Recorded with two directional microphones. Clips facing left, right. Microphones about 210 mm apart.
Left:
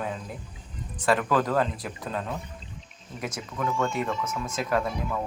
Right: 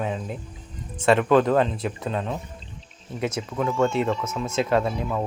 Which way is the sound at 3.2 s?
25° right (ahead or behind).